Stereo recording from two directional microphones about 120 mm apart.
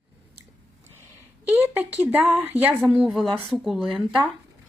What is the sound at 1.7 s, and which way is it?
Speech, 15° right (ahead or behind).